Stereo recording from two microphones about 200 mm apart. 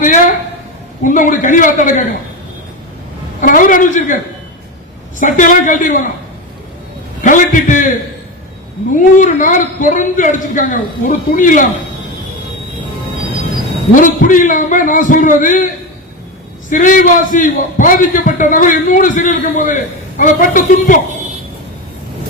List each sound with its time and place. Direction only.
0.0 s a sound: 40° left (ahead or behind)
1.0 s a man's voice: 40° left (ahead or behind)
3.4 s a man's voice: 45° left (ahead or behind)
5.2 s a man's voice: 40° left (ahead or behind)
7.2 s a man's voice: 40° left (ahead or behind)
13.9 s a man's voice: 40° left (ahead or behind)